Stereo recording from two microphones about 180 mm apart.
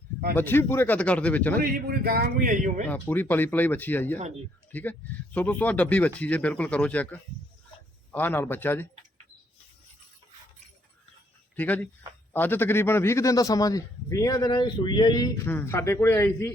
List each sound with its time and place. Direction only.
0.3 s speech: 10° left (ahead or behind)
1.6 s speech: 60° right (ahead or behind)
2.9 s speech: 10° left (ahead or behind)
11.5 s a man's voice: 10° left (ahead or behind)